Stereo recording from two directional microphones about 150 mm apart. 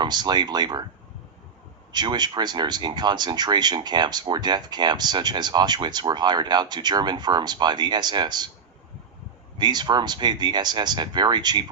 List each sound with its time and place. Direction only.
0.0 s speech: 30° right (ahead or behind)
1.9 s speech: 30° right (ahead or behind)
9.6 s speech: 30° right (ahead or behind)